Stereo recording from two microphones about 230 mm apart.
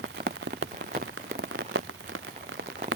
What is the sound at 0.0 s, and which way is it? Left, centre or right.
Rain on surface, right.